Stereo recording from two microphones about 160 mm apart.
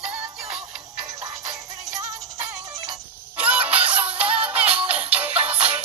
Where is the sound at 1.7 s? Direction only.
20° right (ahead or behind).